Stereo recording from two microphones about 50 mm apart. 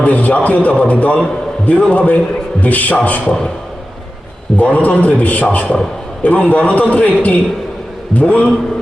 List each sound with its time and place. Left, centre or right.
0.0 s a man's voice: left
4.5 s a man's voice: left